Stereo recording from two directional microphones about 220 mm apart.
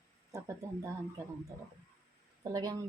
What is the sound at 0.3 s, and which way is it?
Speech, 15° right (ahead or behind).